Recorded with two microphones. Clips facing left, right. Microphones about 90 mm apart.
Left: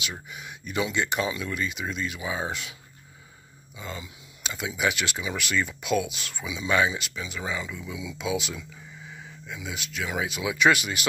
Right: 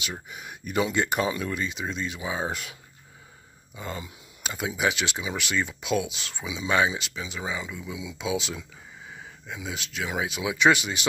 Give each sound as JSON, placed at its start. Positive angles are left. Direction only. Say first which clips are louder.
{"t": 0.3, "sound": "speech", "louder": "right 2 dB", "side_deg": -45}
{"t": 3.7, "sound": "speech", "louder": "right 2 dB", "side_deg": -45}